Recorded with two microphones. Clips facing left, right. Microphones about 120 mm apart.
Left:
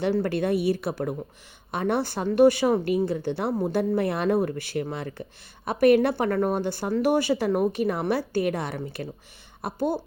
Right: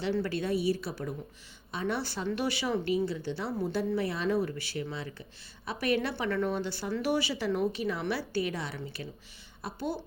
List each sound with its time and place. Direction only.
0.1 s a woman's voice: 50° left (ahead or behind)